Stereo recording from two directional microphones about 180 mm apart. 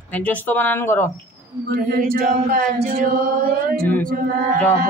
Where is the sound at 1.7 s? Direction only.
50° right (ahead or behind).